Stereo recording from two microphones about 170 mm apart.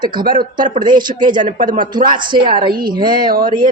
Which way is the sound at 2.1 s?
25° right (ahead or behind).